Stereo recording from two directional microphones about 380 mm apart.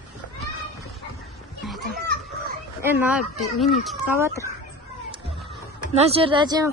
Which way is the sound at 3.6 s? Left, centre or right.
Centre.